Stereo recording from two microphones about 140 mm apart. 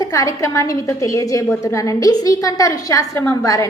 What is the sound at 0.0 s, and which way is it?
A woman's voice, 25° left (ahead or behind).